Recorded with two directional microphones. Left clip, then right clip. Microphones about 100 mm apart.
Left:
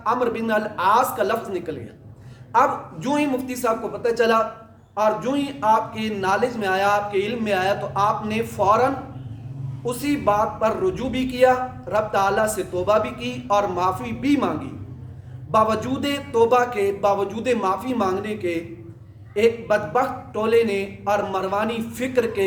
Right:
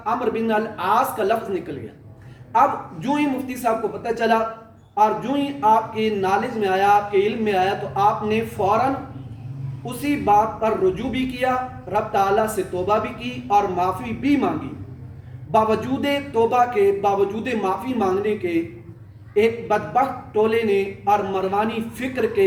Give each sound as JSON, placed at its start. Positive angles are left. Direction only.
{"t": 0.0, "sound": "speech", "side_deg": 35}
{"t": 15.5, "sound": "speech", "side_deg": 35}